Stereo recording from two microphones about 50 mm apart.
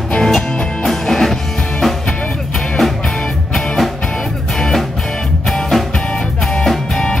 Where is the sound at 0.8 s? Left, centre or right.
Centre.